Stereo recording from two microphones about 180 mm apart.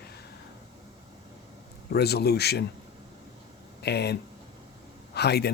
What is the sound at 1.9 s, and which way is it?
Speech, 65° left (ahead or behind).